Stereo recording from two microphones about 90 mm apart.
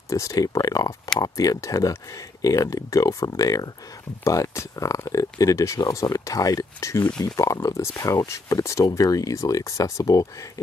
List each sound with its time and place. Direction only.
0.1 s speech: 40° left (ahead or behind)